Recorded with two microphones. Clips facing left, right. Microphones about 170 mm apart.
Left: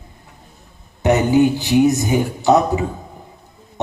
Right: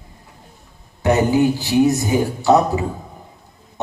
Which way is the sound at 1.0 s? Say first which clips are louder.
Left 1 dB; 20° left (ahead or behind).